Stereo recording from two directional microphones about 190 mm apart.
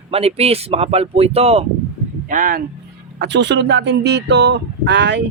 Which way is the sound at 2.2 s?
45° right (ahead or behind).